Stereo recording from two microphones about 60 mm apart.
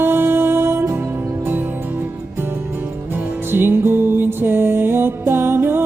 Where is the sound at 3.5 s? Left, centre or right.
Right.